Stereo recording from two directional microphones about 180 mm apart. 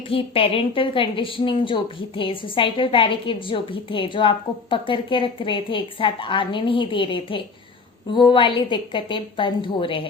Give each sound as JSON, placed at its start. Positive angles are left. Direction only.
{"t": 0.1, "sound": "a woman's voice", "side_deg": 30}